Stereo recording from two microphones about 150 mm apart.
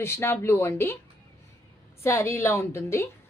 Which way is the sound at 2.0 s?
15° left (ahead or behind).